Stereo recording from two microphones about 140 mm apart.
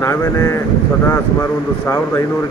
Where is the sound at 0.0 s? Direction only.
20° left (ahead or behind).